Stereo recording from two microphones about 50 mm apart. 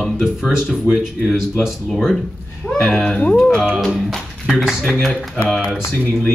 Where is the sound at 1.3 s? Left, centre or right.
Centre.